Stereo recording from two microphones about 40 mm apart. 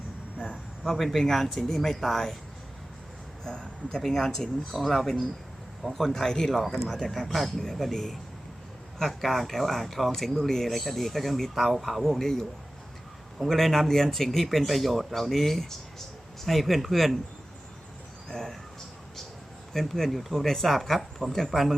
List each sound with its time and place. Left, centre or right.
0.3 s a sound: centre
0.9 s speech: centre
3.4 s speech: centre
6.7 s speech: centre
13.5 s speech: centre
18.3 s speech: centre
19.7 s speech: centre